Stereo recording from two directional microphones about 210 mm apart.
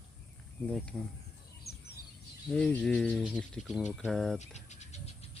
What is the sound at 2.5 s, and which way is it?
Speech, 5° left (ahead or behind).